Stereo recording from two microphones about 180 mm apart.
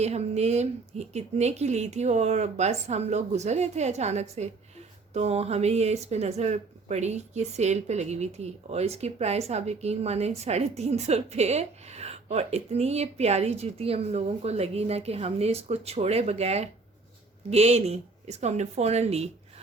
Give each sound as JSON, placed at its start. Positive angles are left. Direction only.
{"t": 0.0, "sound": "speech", "side_deg": -35}